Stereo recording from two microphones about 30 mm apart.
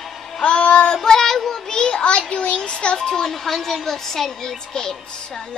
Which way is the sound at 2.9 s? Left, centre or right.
Centre.